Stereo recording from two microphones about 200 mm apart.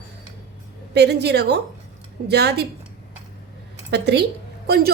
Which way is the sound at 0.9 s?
55° right (ahead or behind).